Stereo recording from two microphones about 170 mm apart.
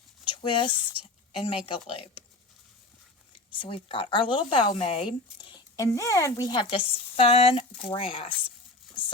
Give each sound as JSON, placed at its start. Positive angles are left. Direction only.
{"t": 0.3, "sound": "a sound", "side_deg": 30}
{"t": 1.3, "sound": "speech", "side_deg": 30}
{"t": 3.5, "sound": "speech", "side_deg": 30}